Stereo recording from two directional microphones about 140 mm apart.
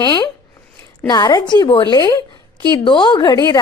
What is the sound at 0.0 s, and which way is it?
A woman's voice, 30° left (ahead or behind).